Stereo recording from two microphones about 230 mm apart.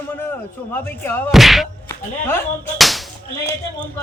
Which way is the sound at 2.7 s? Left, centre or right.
Centre.